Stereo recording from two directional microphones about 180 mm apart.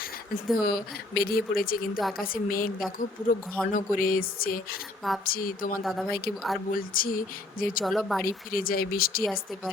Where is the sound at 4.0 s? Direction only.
50° left (ahead or behind).